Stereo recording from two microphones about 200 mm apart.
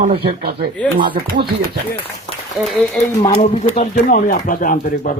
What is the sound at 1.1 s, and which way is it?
Speech, 50° right (ahead or behind).